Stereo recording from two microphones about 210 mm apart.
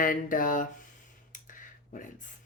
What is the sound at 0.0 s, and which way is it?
Speech, 40° left (ahead or behind).